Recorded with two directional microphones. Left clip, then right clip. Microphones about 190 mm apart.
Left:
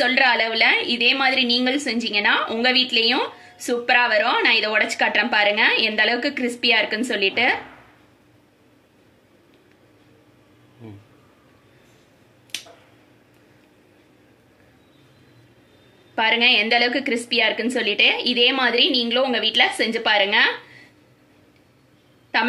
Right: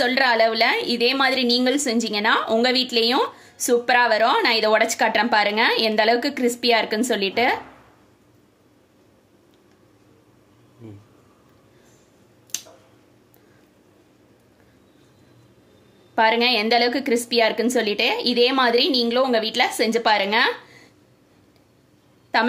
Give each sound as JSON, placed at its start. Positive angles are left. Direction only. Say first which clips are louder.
{"t": 0.0, "sound": "a woman's voice", "louder": "even", "side_deg": -55}
{"t": 16.2, "sound": "a woman's voice", "louder": "left 1 dB", "side_deg": -55}